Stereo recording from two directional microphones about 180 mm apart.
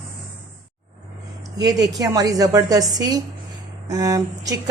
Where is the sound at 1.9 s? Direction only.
20° right (ahead or behind).